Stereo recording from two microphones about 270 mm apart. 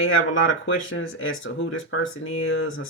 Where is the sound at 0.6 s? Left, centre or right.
Left.